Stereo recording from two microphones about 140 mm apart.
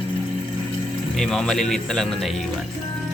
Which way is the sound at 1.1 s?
Centre (ahead or behind).